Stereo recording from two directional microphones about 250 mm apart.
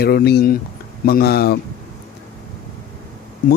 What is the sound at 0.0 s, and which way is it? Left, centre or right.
Speech, left.